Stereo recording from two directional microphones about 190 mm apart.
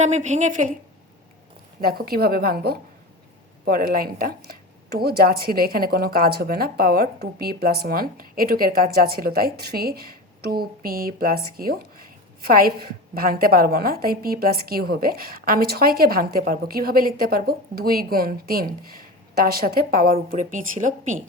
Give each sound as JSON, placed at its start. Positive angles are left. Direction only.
{"t": 0.0, "sound": "speech", "side_deg": -40}
{"t": 1.8, "sound": "a woman's voice", "side_deg": -50}
{"t": 20.1, "sound": "speech", "side_deg": -35}